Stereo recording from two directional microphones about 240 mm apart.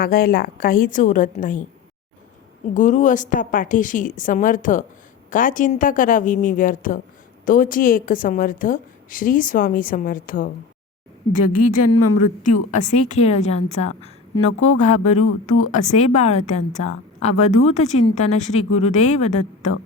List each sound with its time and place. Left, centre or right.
0.0 s a woman's voice: left
2.7 s a woman's voice: left
11.5 s a woman's voice: left
11.8 s a woman's voice: left
12.2 s a woman's voice: left